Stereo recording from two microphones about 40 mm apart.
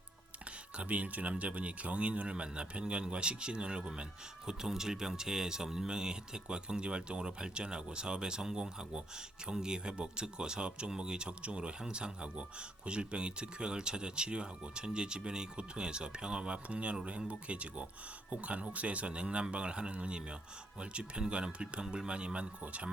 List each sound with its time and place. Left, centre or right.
0.8 s speech: right
4.4 s speech: centre
22.6 s speech: right